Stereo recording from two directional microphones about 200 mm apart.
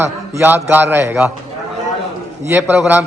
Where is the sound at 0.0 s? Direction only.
10° right (ahead or behind).